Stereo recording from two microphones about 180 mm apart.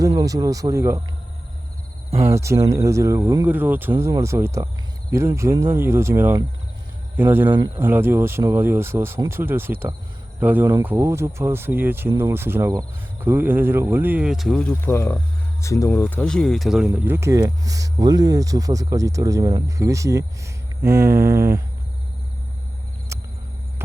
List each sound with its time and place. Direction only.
0.0 s speech: 20° right (ahead or behind)
2.2 s speech: 15° right (ahead or behind)
23.1 s a sound: 15° right (ahead or behind)